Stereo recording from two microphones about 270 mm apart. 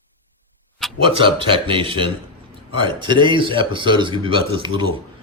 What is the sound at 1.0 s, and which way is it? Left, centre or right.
A man's voice, centre.